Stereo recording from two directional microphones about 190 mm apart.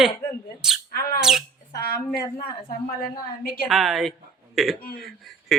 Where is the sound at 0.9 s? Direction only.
50° left (ahead or behind).